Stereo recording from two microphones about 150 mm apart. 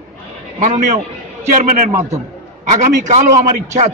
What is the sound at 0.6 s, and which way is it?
Speech, 55° right (ahead or behind).